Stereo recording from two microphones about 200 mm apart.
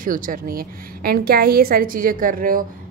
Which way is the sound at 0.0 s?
45° right (ahead or behind).